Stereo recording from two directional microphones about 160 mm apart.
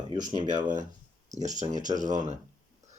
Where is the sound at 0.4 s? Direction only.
50° right (ahead or behind).